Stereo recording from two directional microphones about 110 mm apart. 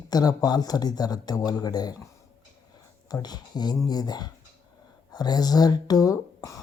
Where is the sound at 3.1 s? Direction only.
40° left (ahead or behind).